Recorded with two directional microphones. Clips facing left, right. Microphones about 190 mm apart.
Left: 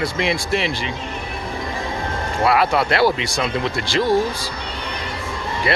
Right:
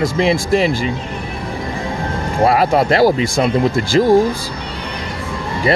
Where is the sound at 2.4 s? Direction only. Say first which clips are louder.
Right 4 dB; 45° right (ahead or behind).